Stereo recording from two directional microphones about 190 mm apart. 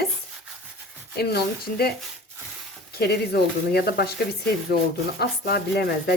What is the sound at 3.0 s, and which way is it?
Speech, 55° left (ahead or behind).